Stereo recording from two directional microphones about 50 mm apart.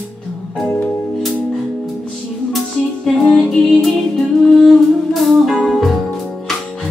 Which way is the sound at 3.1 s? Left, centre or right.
Centre.